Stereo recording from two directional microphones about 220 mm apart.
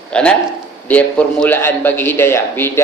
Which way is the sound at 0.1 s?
5° left (ahead or behind).